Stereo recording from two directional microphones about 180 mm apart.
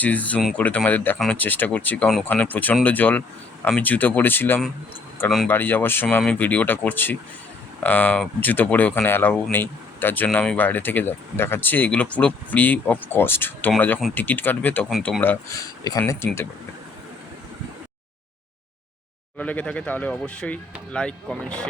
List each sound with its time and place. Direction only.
0.0 s speech: 10° left (ahead or behind)
15.2 s speech: 15° left (ahead or behind)
19.4 s speech: 5° left (ahead or behind)